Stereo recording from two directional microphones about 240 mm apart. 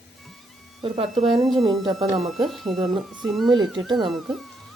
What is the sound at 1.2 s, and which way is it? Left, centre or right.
A woman's voice, centre.